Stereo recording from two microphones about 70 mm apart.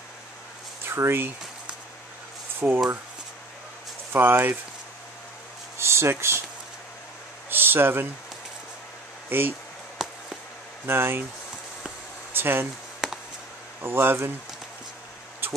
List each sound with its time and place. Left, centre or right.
0.8 s speech: right
2.6 s speech: right
4.1 s speech: right
5.8 s speech: right
7.4 s a sound: right
9.3 s speech: right
10.0 s a sound: centre
10.9 s speech: right
12.4 s speech: right
13.0 s a sound: centre
13.7 s speech: right
15.4 s a sound: right